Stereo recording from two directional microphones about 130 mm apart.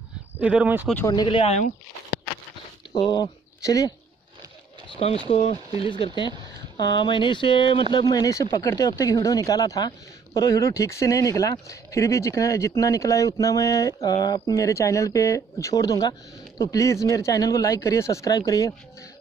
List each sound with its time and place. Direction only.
0.4 s speech: 10° right (ahead or behind)
1.0 s speech: 35° left (ahead or behind)
3.1 s speech: 30° left (ahead or behind)
4.8 s a sound: 40° left (ahead or behind)
5.3 s speech: 50° left (ahead or behind)
8.1 s speech: 25° left (ahead or behind)
14.5 s speech: 20° left (ahead or behind)